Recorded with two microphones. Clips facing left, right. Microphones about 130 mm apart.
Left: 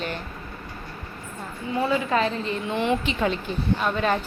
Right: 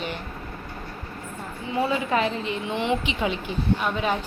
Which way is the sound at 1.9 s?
20° right (ahead or behind).